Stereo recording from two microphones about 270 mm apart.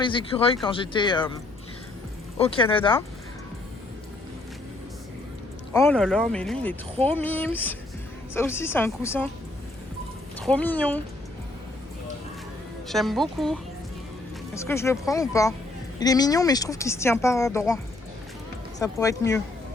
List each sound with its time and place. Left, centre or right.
0.0 s speech: centre
2.4 s speech: centre
5.7 s speech: centre
10.4 s speech: centre
12.9 s speech: centre
18.8 s speech: centre